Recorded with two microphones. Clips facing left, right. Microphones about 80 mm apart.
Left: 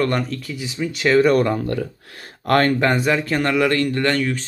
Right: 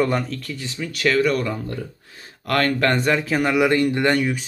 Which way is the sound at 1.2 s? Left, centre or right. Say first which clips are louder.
Left 5 dB; left.